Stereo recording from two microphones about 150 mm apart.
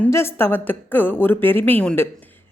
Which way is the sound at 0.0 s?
15° left (ahead or behind).